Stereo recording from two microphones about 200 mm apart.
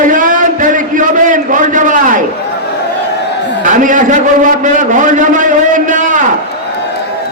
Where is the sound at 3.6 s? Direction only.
40° right (ahead or behind).